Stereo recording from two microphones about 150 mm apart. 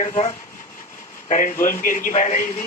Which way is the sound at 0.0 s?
50° left (ahead or behind).